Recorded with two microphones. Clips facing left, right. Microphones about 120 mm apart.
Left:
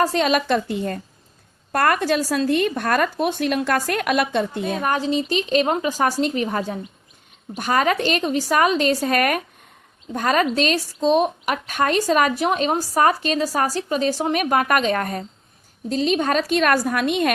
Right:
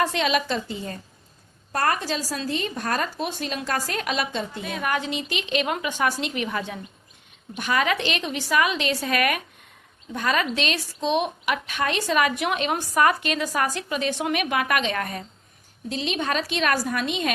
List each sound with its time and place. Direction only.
0.0 s a woman's voice: 40° left (ahead or behind); by 4.6 s 60° left (ahead or behind)
4.6 s a woman's voice: 35° left (ahead or behind); by 17.3 s 55° left (ahead or behind)